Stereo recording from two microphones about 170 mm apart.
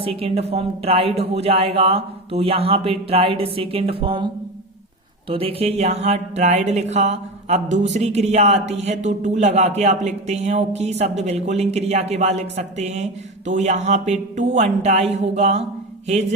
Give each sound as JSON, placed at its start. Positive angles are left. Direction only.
{"t": 0.0, "sound": "speech", "side_deg": -35}
{"t": 5.3, "sound": "speech", "side_deg": -35}